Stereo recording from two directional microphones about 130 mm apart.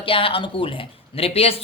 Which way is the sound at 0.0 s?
45° left (ahead or behind).